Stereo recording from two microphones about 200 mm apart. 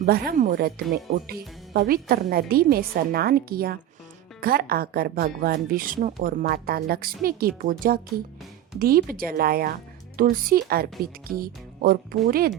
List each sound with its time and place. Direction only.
0.0 s speech: 45° right (ahead or behind)